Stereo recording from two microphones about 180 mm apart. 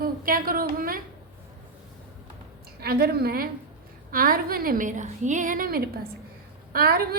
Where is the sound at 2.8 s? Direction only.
60° right (ahead or behind).